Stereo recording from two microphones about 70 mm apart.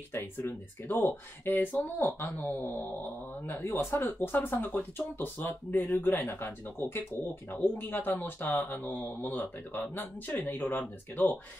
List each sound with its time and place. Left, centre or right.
0.5 s speech: left